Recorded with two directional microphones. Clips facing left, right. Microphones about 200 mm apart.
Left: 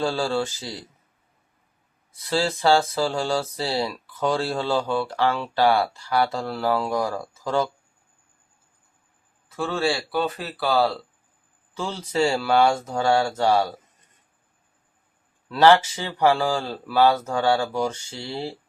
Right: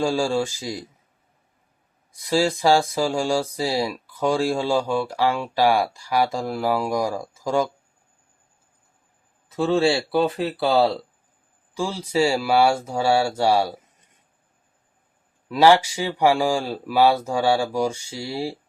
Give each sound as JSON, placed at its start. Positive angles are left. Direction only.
{"t": 0.0, "sound": "speech", "side_deg": -10}
{"t": 2.1, "sound": "speech", "side_deg": -10}
{"t": 9.6, "sound": "speech", "side_deg": -25}
{"t": 11.7, "sound": "speech", "side_deg": -10}
{"t": 15.4, "sound": "speech", "side_deg": -10}